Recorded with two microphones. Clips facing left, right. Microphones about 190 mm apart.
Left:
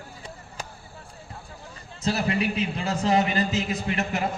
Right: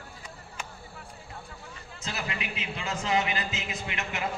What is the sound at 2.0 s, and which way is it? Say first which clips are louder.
A man's voice: left 11 dB; 35° left (ahead or behind).